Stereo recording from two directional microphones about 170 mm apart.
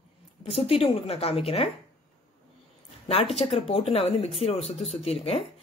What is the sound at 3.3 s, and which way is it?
Speech, 35° left (ahead or behind).